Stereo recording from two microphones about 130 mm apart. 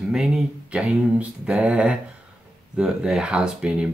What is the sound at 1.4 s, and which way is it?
Speech, 10° right (ahead or behind).